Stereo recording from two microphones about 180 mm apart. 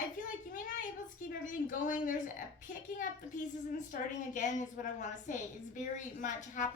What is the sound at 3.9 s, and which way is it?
A woman's voice, 50° left (ahead or behind).